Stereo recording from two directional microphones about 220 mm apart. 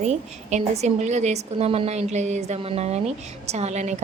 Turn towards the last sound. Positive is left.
turn(degrees=-30)  # may be behind; listen again after turning